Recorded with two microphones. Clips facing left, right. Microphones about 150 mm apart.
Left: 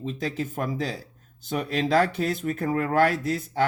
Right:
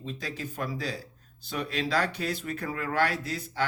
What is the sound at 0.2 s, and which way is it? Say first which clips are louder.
Speech: left 7 dB; 50° left (ahead or behind).